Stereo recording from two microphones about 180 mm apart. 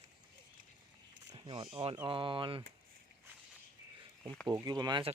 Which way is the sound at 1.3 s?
25° right (ahead or behind).